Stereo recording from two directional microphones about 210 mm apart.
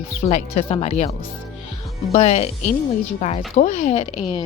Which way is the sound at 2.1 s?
30° left (ahead or behind).